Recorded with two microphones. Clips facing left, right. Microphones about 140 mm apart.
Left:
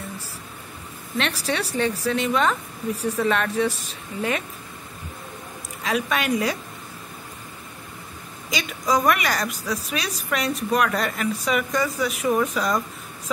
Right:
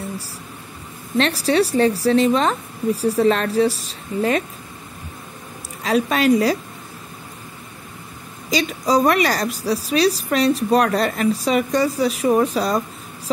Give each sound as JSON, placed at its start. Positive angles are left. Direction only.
{"t": 1.1, "sound": "a woman's voice", "side_deg": -35}
{"t": 5.9, "sound": "a woman's voice", "side_deg": -35}
{"t": 8.5, "sound": "a woman's voice", "side_deg": -35}